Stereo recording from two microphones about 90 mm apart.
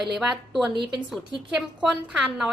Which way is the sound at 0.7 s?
60° right (ahead or behind).